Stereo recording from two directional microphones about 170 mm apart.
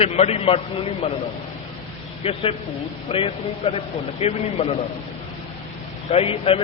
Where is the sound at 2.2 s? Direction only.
35° left (ahead or behind).